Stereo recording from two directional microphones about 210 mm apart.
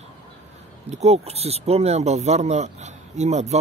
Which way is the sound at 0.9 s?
30° right (ahead or behind).